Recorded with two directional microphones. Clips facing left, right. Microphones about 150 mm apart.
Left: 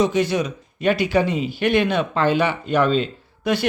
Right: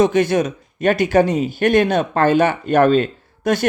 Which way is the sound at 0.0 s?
50° right (ahead or behind).